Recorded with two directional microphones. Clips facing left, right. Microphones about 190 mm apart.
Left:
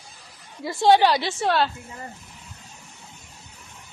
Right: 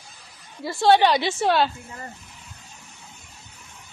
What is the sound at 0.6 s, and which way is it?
Speech, 20° left (ahead or behind).